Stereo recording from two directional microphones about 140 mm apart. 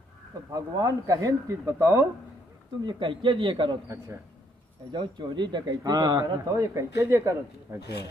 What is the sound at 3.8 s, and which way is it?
Speech, 20° right (ahead or behind).